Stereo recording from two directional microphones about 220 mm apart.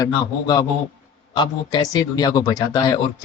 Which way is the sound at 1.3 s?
20° left (ahead or behind).